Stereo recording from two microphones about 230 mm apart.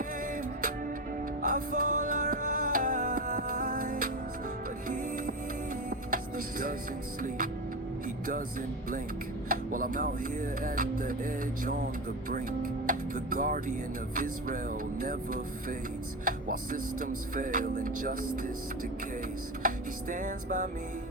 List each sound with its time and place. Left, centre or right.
1.4 s music: right
9.5 s music: right
12.3 s speech: right
14.2 s music: right
16.2 s music: right
19.6 s music: right